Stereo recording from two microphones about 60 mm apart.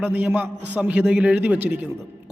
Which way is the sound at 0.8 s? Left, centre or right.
Centre.